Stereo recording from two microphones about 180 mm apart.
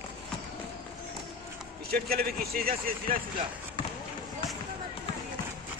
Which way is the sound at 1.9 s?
55° right (ahead or behind).